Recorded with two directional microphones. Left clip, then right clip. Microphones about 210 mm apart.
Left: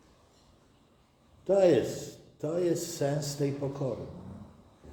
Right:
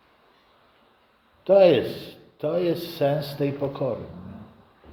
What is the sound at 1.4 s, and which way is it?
A man's voice, 20° right (ahead or behind).